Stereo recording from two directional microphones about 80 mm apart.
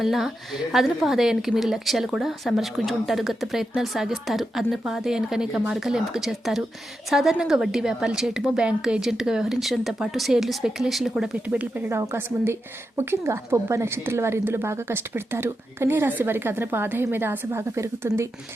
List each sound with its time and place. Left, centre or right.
0.0 s a woman's voice: centre
11.4 s a woman's voice: centre
11.9 s a woman's voice: right